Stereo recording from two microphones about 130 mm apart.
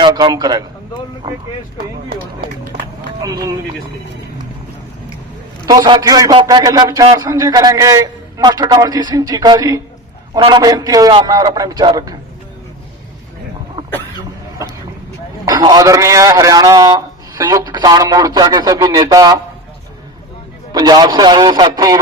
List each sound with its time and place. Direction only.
0.0 s a man's voice: 35° right (ahead or behind)
2.8 s a sound: 25° right (ahead or behind)
5.6 s a man's voice: 30° right (ahead or behind)
15.4 s a man's voice: 30° right (ahead or behind)
20.7 s a man's voice: 35° right (ahead or behind)